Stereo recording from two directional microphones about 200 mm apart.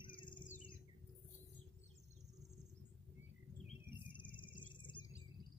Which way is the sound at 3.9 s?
25° left (ahead or behind).